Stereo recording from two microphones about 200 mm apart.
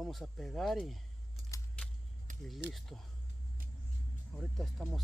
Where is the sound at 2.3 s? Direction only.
40° right (ahead or behind).